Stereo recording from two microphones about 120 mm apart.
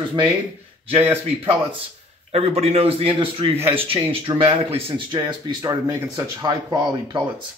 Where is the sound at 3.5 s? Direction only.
20° right (ahead or behind).